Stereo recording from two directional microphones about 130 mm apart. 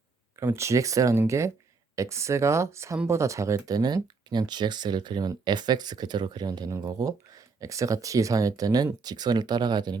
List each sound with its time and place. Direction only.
0.3 s speech: 20° right (ahead or behind)